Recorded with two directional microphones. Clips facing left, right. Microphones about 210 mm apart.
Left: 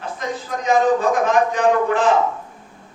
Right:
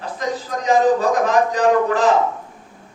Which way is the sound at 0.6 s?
35° right (ahead or behind).